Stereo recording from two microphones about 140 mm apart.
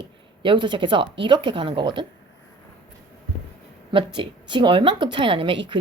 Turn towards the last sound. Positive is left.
turn(degrees=-35)  # may be behind; listen again after turning